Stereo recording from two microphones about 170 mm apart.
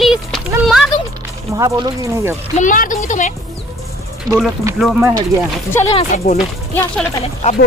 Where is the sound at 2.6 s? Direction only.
50° left (ahead or behind).